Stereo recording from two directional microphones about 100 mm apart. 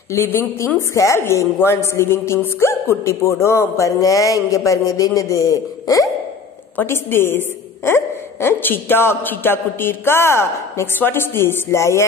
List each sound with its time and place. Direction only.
0.1 s a woman's voice: 25° left (ahead or behind)
6.8 s a woman's voice: 25° left (ahead or behind)